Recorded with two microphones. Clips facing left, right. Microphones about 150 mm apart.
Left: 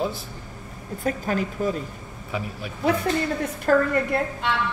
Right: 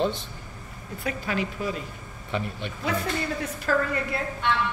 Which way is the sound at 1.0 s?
45° left (ahead or behind).